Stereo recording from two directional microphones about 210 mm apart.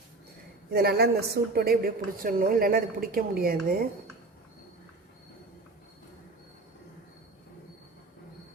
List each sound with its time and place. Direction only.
0.7 s a woman's voice: 50° right (ahead or behind)